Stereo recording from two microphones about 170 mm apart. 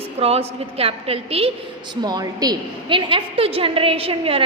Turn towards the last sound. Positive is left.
turn(degrees=-35)  # may be behind; listen again after turning